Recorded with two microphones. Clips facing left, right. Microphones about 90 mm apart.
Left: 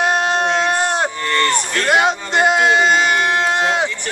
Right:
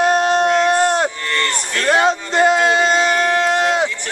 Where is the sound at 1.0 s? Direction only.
5° left (ahead or behind).